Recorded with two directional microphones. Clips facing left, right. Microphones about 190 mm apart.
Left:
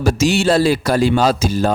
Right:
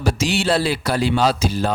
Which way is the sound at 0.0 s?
45° left (ahead or behind).